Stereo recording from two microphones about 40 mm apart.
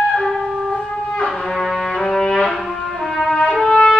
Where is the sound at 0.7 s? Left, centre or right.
Centre.